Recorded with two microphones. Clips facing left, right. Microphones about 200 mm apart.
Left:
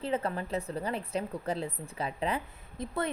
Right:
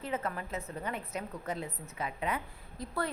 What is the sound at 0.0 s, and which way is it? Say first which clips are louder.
A woman's voice: left 4 dB; 30° left (ahead or behind).